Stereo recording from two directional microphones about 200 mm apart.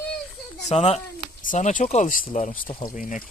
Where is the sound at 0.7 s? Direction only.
30° left (ahead or behind).